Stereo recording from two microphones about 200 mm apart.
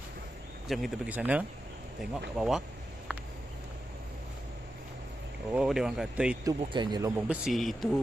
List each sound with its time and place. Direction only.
0.7 s speech: centre (ahead or behind)
5.5 s speech: 5° right (ahead or behind)
6.4 s speech: 20° right (ahead or behind)
7.2 s speech: 5° right (ahead or behind)